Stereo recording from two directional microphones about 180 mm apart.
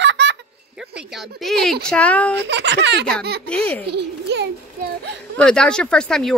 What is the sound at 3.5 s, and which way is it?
Speech, 10° left (ahead or behind).